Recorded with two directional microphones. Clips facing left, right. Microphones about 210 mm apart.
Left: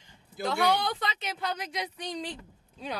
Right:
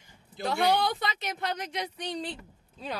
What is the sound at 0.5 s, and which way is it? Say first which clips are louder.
Speech: right 1 dB; 10° right (ahead or behind).